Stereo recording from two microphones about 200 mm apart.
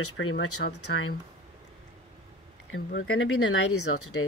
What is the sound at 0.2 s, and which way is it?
Speech, 75° left (ahead or behind).